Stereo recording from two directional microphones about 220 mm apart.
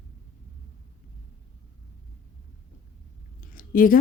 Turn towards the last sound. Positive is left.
turn(degrees=40)  # may be behind; listen again after turning